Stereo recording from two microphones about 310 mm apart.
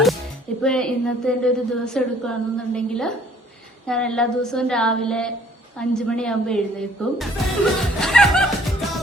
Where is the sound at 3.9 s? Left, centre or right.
Centre.